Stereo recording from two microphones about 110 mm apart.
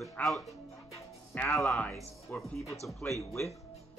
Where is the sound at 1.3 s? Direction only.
15° left (ahead or behind).